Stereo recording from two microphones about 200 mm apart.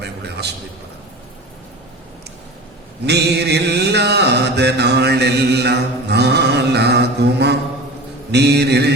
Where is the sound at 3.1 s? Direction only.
55° right (ahead or behind).